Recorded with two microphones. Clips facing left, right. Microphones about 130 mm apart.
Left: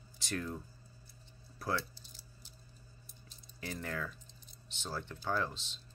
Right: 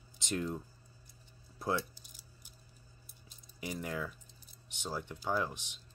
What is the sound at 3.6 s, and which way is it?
Speech, 15° right (ahead or behind).